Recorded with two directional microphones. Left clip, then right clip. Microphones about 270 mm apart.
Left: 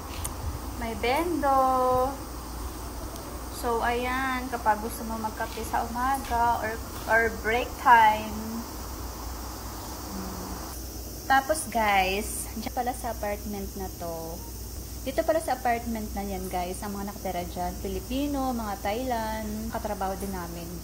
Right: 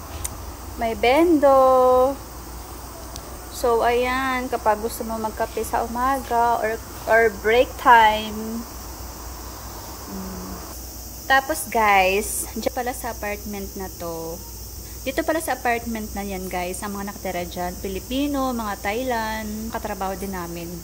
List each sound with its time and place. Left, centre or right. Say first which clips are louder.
0.7 s speech: right 9 dB; right
3.6 s speech: right 8 dB; centre
11.3 s a woman's voice: right 5 dB; centre
15.0 s speech: right 3 dB; right